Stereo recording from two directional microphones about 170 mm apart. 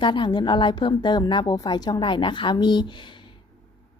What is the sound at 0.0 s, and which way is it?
A woman's voice, 30° left (ahead or behind).